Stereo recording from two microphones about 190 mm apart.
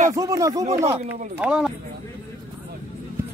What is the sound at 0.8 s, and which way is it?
Speech, 35° right (ahead or behind).